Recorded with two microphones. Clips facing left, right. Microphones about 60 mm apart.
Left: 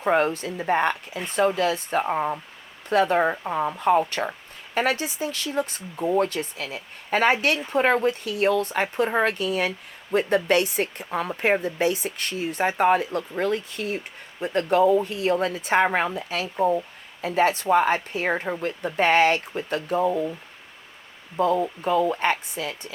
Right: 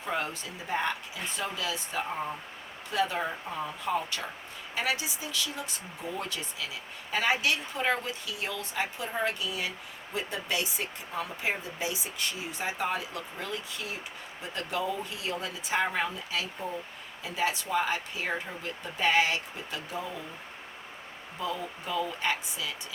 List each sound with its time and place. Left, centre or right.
0.0 s speech: left
21.3 s speech: left